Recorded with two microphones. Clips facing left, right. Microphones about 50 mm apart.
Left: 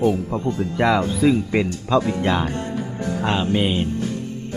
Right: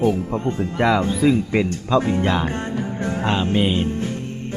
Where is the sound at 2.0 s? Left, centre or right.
Right.